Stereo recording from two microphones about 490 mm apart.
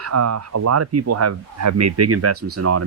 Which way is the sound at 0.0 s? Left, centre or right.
Right.